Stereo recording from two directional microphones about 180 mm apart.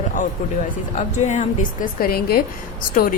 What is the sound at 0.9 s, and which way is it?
Speech, 40° left (ahead or behind).